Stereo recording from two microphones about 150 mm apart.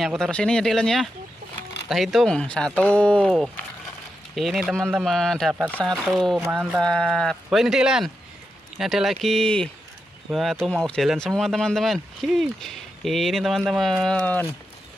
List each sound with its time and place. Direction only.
0.0 s speech: centre (ahead or behind)
6.8 s speech: 5° left (ahead or behind)